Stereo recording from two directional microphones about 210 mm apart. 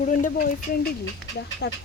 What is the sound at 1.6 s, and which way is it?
Speech, 55° left (ahead or behind).